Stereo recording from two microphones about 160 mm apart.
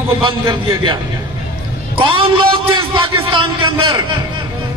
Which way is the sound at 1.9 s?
35° right (ahead or behind).